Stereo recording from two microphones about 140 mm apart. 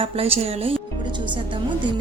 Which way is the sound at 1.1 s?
35° right (ahead or behind).